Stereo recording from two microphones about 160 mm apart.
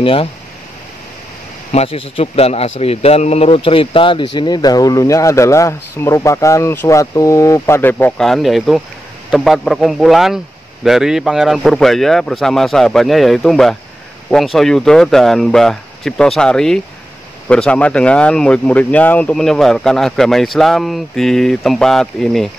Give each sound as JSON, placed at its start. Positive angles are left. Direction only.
{"t": 0.0, "sound": "speech", "side_deg": 35}
{"t": 1.7, "sound": "speech", "side_deg": 40}